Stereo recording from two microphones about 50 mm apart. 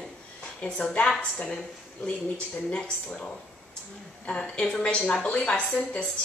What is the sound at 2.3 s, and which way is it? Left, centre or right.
Speech, centre.